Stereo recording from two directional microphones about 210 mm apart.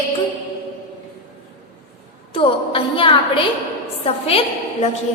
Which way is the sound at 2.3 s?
25° left (ahead or behind).